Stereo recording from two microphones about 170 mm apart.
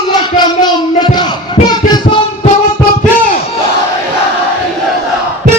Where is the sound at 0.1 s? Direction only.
25° left (ahead or behind).